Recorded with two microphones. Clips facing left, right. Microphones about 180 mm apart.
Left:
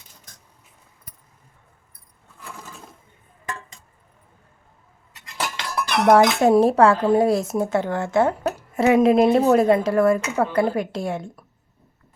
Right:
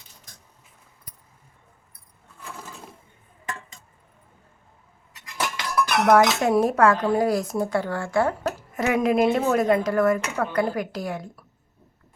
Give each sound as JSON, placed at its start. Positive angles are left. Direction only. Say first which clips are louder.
{"t": 5.1, "sound": "cutlery", "louder": "even", "side_deg": 25}